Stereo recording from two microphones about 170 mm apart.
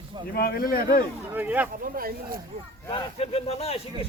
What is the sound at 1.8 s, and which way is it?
Speech, 60° right (ahead or behind).